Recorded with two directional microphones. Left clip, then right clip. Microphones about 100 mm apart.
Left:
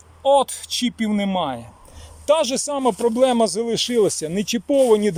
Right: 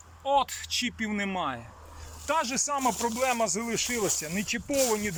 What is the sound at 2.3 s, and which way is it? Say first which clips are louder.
Speech: left 9 dB; 90° left.